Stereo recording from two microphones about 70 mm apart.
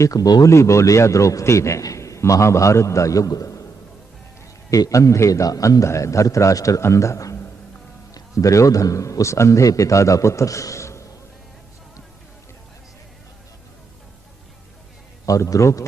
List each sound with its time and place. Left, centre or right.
0.0 s speech: left
0.4 s a man's voice: left
4.7 s a man's voice: left
15.3 s a man's voice: left